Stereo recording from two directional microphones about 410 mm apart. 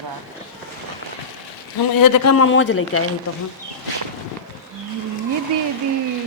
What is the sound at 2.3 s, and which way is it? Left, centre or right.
Speech, left.